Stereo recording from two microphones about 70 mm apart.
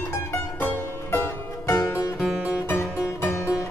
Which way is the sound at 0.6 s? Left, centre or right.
Left.